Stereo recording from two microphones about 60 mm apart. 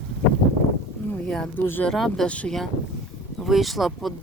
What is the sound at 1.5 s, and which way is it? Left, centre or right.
Speech, left.